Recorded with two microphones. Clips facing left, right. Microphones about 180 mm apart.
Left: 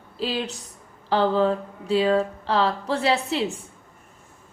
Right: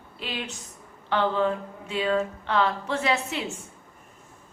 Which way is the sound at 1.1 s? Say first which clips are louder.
Left 4 dB; 35° left (ahead or behind).